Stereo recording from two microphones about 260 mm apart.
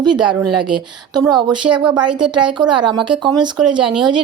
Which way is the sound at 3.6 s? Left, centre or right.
Centre.